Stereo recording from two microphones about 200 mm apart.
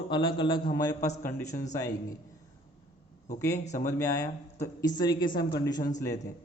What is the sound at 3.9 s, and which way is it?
A man's voice, 15° left (ahead or behind).